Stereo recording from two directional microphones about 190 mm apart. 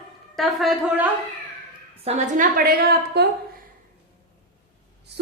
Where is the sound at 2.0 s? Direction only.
40° right (ahead or behind).